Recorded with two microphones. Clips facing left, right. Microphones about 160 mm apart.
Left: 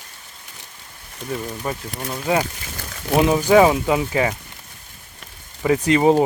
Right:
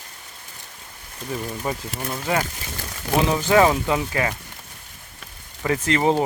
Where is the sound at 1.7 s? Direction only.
15° right (ahead or behind).